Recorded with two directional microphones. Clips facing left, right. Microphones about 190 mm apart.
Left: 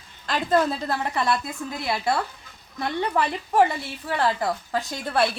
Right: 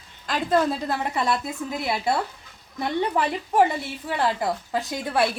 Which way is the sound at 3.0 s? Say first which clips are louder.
Right 1 dB; 10° right (ahead or behind).